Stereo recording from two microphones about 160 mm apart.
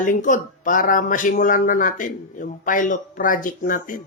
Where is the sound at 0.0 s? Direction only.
55° left (ahead or behind).